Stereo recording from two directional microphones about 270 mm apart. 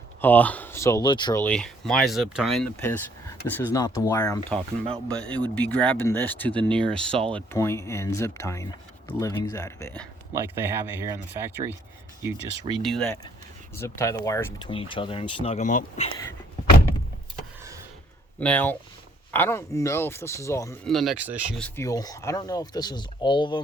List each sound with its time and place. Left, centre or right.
0.2 s speech: centre
10.3 s speech: centre
12.7 s speech: centre
13.7 s speech: centre; by 16.0 s left
18.3 s speech: centre
21.8 s speech: centre